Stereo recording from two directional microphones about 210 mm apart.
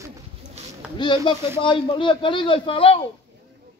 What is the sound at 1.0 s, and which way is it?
A man's voice, 20° left (ahead or behind).